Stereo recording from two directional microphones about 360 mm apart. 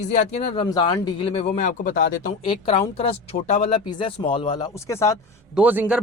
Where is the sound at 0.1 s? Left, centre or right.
Centre.